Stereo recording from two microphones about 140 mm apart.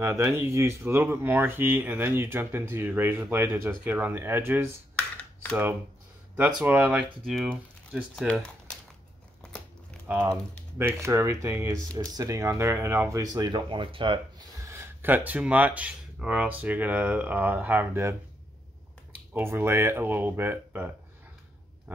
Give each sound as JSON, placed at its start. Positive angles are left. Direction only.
{"t": 0.0, "sound": "speech", "side_deg": -15}
{"t": 4.9, "sound": "a sound", "side_deg": 10}
{"t": 6.6, "sound": "speech", "side_deg": -15}
{"t": 7.2, "sound": "speech", "side_deg": 0}
{"t": 9.4, "sound": "crumpling", "side_deg": 5}
{"t": 10.0, "sound": "speech", "side_deg": -15}
{"t": 13.2, "sound": "speech", "side_deg": -30}
{"t": 14.6, "sound": "speech", "side_deg": -20}
{"t": 19.3, "sound": "speech", "side_deg": -15}
{"t": 21.9, "sound": "a sound", "side_deg": -15}